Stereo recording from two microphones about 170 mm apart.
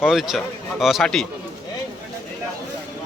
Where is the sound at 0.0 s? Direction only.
Centre (ahead or behind).